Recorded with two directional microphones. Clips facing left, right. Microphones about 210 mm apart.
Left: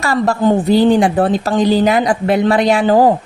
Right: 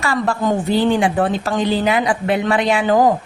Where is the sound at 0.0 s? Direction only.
40° left (ahead or behind).